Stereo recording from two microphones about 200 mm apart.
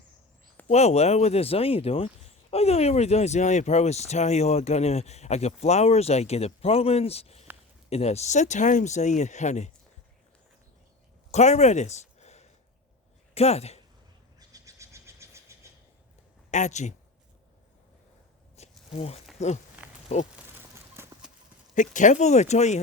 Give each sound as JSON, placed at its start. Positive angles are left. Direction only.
{"t": 0.7, "sound": "speech", "side_deg": 30}
{"t": 11.3, "sound": "a sound", "side_deg": 35}
{"t": 13.3, "sound": "speech", "side_deg": 30}
{"t": 14.3, "sound": "a sound", "side_deg": -15}
{"t": 16.5, "sound": "speech", "side_deg": 35}
{"t": 18.9, "sound": "speech", "side_deg": 30}
{"t": 19.8, "sound": "a sound", "side_deg": -10}
{"t": 20.9, "sound": "clip-clop", "side_deg": -5}
{"t": 21.8, "sound": "speech", "side_deg": 40}